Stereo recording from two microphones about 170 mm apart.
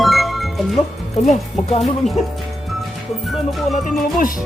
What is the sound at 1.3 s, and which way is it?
Speech, 40° left (ahead or behind).